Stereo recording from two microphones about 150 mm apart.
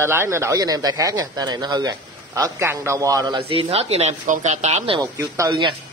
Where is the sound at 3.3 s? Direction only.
40° right (ahead or behind).